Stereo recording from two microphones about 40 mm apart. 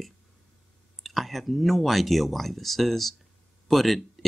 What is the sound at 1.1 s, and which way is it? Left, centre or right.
Speech, centre.